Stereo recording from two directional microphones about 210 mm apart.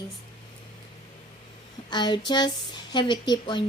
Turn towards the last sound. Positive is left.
turn(degrees=20)  # may be behind; listen again after turning